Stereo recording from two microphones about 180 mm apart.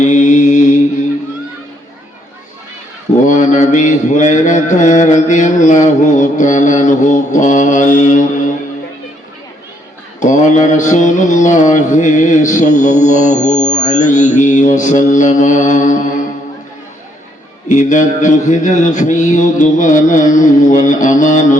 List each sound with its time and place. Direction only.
0.0 s mantra: 40° left (ahead or behind)
3.2 s mantra: 40° left (ahead or behind)
10.2 s mantra: 45° left (ahead or behind)
17.7 s mantra: 45° left (ahead or behind)